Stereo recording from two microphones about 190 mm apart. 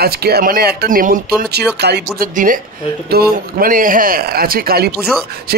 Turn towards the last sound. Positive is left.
turn(degrees=-50)  # may be behind; listen again after turning